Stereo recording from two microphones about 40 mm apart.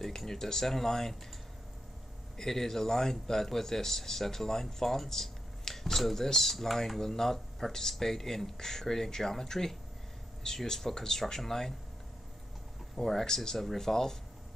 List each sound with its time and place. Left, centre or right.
0.0 s a man's voice: centre
2.3 s a man's voice: centre
12.9 s a man's voice: centre